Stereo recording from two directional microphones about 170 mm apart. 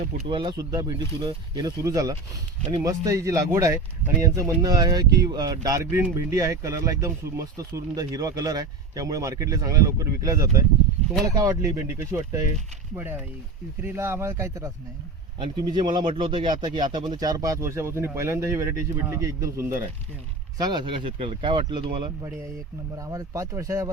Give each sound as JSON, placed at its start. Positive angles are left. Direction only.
{"t": 0.0, "sound": "speech", "side_deg": -50}
{"t": 0.3, "sound": "speech", "side_deg": -30}
{"t": 13.8, "sound": "speech", "side_deg": -15}
{"t": 20.6, "sound": "speech", "side_deg": -25}